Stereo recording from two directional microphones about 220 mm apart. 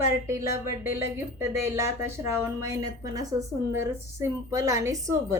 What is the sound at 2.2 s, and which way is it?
A woman's voice, 10° right (ahead or behind).